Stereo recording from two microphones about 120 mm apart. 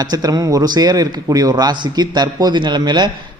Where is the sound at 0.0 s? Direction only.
30° right (ahead or behind).